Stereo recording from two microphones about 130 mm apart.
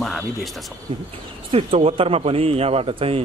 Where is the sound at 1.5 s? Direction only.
45° right (ahead or behind).